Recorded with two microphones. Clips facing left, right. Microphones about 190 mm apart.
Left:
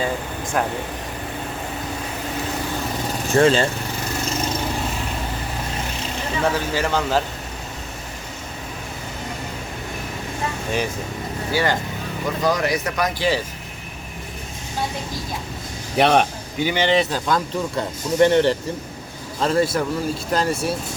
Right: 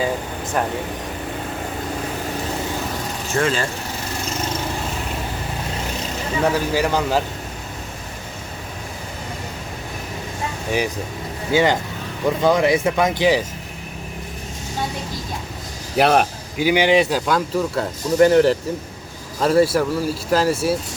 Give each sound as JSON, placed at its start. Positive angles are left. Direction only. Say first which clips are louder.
{"t": 0.6, "sound": "speech", "louder": "even", "side_deg": 0}
{"t": 3.3, "sound": "speech", "louder": "left 5 dB", "side_deg": 30}
{"t": 6.5, "sound": "speech", "louder": "right 2 dB", "side_deg": -10}
{"t": 11.5, "sound": "speech", "louder": "right 5 dB", "side_deg": -20}
{"t": 16.0, "sound": "speech", "louder": "right 1 dB", "side_deg": -5}